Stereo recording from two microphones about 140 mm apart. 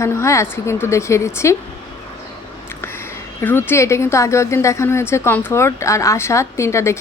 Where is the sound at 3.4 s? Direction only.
15° left (ahead or behind).